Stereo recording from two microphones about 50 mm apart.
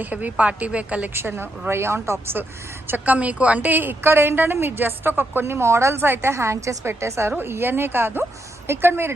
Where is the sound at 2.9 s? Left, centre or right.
Right.